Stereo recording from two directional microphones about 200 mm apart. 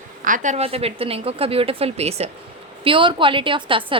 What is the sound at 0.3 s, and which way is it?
A woman's voice, 40° right (ahead or behind).